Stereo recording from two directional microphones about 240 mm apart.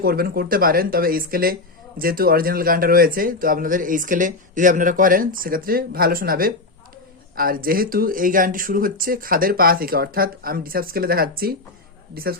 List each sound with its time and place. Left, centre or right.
0.0 s speech: right